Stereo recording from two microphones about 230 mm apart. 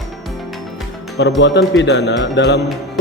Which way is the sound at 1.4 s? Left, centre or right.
Left.